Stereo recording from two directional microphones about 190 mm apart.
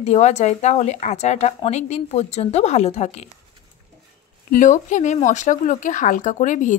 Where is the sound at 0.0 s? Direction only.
35° left (ahead or behind).